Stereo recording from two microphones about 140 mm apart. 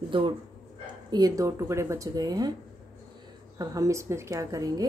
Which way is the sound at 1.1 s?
25° right (ahead or behind).